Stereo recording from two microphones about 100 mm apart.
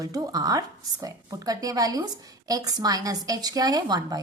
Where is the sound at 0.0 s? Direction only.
35° right (ahead or behind).